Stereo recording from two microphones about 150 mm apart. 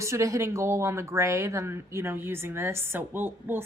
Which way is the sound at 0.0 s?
20° right (ahead or behind).